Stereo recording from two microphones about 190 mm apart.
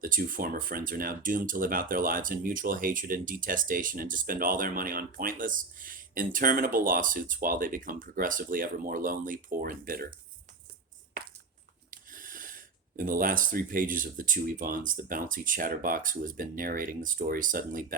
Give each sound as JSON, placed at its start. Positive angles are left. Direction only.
{"t": 0.0, "sound": "speech", "side_deg": -45}
{"t": 11.9, "sound": "speech", "side_deg": -45}